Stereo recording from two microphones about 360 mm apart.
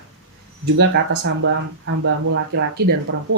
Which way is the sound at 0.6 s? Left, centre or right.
Right.